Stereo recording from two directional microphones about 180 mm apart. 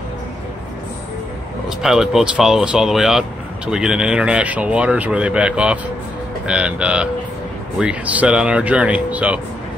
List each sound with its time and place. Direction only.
1.8 s speech: centre (ahead or behind)